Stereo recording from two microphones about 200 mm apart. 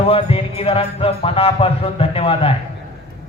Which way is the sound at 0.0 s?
30° left (ahead or behind).